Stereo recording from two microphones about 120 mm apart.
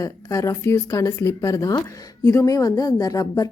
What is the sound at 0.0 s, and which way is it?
A woman's voice, 30° left (ahead or behind).